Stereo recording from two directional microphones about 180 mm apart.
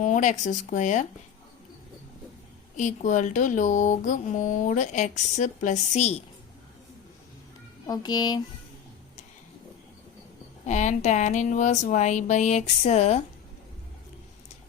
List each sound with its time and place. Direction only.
0.0 s speech: 45° left (ahead or behind)
2.7 s speech: 40° left (ahead or behind)
7.9 s speech: 20° left (ahead or behind)
10.7 s speech: 40° left (ahead or behind)